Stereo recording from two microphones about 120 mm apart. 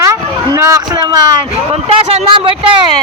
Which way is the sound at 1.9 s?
45° right (ahead or behind).